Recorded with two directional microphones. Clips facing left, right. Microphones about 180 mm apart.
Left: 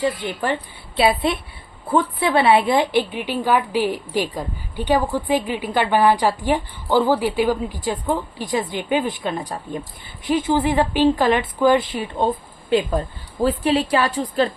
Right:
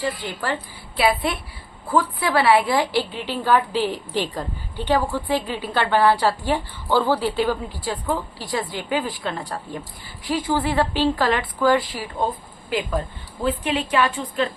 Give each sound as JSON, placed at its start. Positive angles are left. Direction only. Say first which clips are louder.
{"t": 0.0, "sound": "a woman's voice", "louder": "left 4 dB", "side_deg": 20}